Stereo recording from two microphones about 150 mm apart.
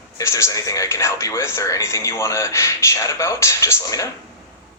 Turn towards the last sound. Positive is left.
turn(degrees=20)  # may be behind; listen again after turning